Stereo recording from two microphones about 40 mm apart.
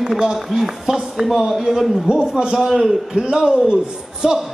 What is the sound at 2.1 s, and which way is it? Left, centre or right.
Speech, right.